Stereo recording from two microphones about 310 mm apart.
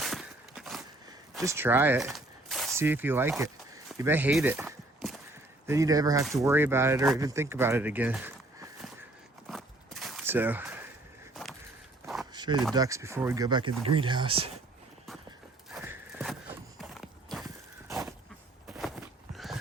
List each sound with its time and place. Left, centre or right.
0.0 s walk: centre
1.3 s speech: centre
3.9 s walk: centre
5.6 s speech: centre
9.5 s walk: centre
12.0 s walk: centre
12.3 s a sound: centre
12.7 s speech: centre
15.7 s horse: centre
18.8 s a sound: centre